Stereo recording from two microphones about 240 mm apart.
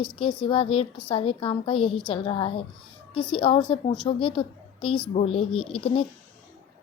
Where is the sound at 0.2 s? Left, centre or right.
Left.